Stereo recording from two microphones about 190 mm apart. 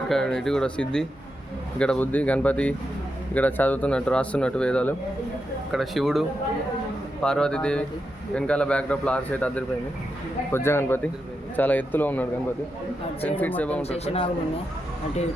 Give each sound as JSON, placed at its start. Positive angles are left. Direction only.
{"t": 0.1, "sound": "a man's voice", "side_deg": 5}
{"t": 13.8, "sound": "a man's voice", "side_deg": 35}